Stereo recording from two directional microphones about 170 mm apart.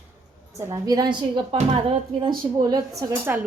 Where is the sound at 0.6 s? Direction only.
20° right (ahead or behind).